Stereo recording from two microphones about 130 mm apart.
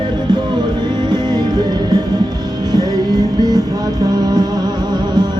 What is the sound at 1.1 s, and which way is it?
Music, 35° right (ahead or behind).